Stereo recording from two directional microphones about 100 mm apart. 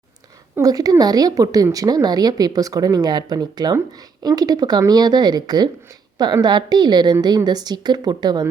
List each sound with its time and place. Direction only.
0.6 s a woman's voice: 40° right (ahead or behind)